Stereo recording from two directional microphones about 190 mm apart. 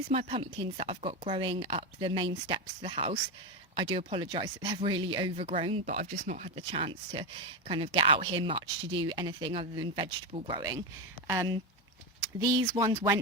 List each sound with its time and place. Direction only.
0.1 s speech: 30° right (ahead or behind)
5.8 s speech: 40° right (ahead or behind)
6.6 s speech: 30° right (ahead or behind)